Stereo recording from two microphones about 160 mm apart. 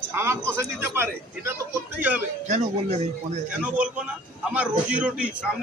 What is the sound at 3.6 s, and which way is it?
A man's voice, 5° right (ahead or behind).